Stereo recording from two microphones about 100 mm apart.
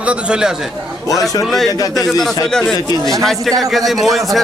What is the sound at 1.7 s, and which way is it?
Speech, 35° left (ahead or behind).